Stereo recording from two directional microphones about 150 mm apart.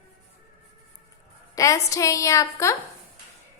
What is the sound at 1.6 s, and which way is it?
A woman's voice, 20° left (ahead or behind).